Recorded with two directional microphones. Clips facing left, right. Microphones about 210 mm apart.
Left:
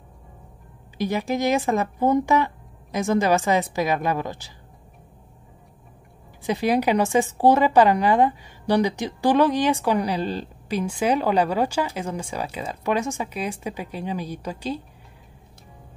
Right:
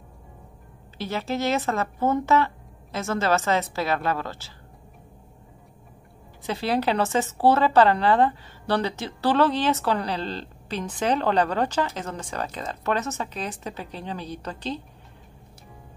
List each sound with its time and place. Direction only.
0.9 s speech: 15° left (ahead or behind)
6.4 s speech: 15° left (ahead or behind)